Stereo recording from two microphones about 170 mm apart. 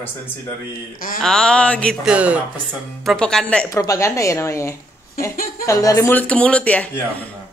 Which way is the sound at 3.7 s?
20° left (ahead or behind).